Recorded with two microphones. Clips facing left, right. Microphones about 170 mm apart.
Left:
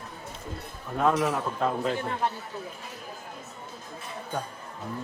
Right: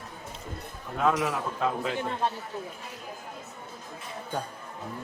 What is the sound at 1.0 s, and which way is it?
Speech, centre (ahead or behind).